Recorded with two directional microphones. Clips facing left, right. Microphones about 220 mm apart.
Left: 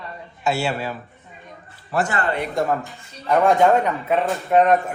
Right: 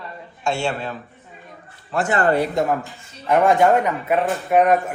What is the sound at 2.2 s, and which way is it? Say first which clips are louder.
Speech: right 6 dB; 40° right (ahead or behind).